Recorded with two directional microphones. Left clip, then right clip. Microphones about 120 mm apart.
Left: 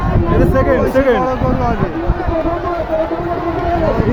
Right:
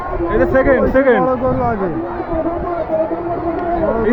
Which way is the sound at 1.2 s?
40° right (ahead or behind).